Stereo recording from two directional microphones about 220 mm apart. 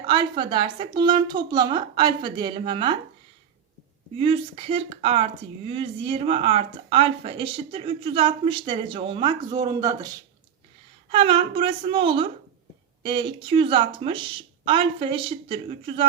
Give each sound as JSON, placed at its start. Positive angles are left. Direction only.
{"t": 0.0, "sound": "speech", "side_deg": -20}
{"t": 4.2, "sound": "speech", "side_deg": -25}
{"t": 11.1, "sound": "speech", "side_deg": -25}